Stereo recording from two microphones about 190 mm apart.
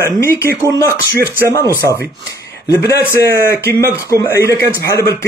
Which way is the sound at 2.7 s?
10° left (ahead or behind).